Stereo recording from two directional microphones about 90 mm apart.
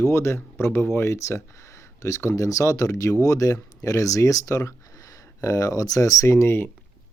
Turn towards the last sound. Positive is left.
turn(degrees=30)  # may be behind; listen again after turning